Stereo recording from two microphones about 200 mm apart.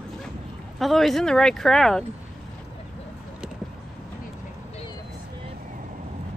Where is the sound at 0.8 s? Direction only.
Centre (ahead or behind).